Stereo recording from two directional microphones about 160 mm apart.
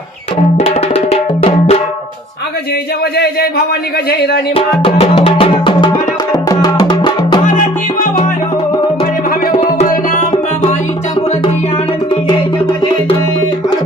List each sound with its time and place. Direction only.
0.5 s music: 40° left (ahead or behind)
4.1 s speech: 90° left
4.5 s music: 35° left (ahead or behind)
6.3 s music: 25° left (ahead or behind)
9.6 s music: 45° left (ahead or behind)